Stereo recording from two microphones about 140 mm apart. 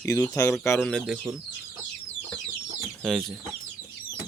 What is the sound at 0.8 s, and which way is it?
Speech, 5° left (ahead or behind).